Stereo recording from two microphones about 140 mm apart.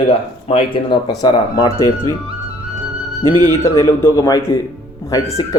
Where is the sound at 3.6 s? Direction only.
20° left (ahead or behind).